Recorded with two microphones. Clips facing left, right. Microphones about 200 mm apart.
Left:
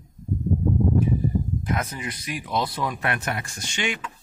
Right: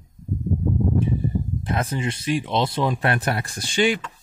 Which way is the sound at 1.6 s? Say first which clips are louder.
Right 3 dB; 30° right (ahead or behind).